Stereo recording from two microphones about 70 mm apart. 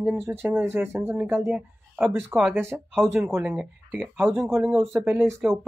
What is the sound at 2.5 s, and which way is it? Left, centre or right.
Speech, right.